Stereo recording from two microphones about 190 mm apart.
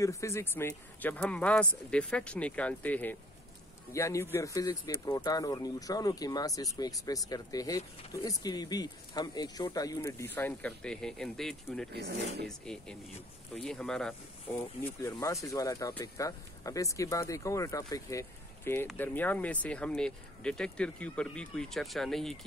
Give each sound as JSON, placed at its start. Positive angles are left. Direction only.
{"t": 0.0, "sound": "speech", "side_deg": 15}
{"t": 14.8, "sound": "speech", "side_deg": 15}